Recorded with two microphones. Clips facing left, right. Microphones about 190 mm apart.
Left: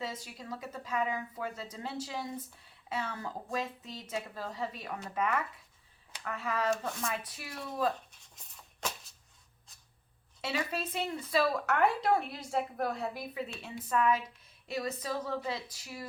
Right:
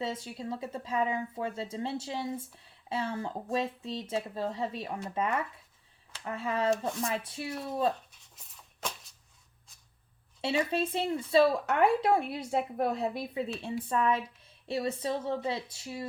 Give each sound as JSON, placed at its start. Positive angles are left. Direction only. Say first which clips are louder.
{"t": 0.0, "sound": "speech", "louder": "right 5 dB", "side_deg": -30}
{"t": 8.4, "sound": "a sound", "louder": "even", "side_deg": 0}
{"t": 10.4, "sound": "speech", "louder": "right 6 dB", "side_deg": -30}